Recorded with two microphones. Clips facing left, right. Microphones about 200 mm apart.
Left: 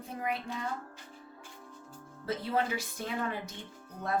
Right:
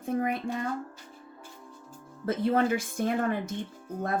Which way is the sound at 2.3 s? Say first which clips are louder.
Right 7 dB; 50° right (ahead or behind).